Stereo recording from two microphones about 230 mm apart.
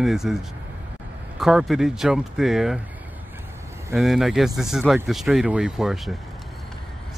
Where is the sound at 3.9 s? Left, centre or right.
Centre.